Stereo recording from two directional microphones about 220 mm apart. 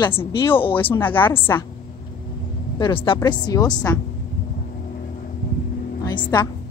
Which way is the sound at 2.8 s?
25° left (ahead or behind).